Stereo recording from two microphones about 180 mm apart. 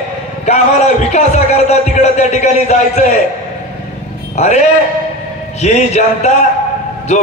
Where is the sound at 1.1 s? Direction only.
40° left (ahead or behind).